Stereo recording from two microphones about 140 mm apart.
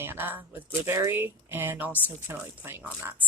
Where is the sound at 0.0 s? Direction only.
15° right (ahead or behind).